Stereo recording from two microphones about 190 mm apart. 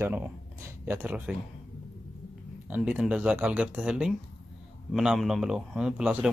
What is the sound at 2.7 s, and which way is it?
A man's voice, 5° right (ahead or behind).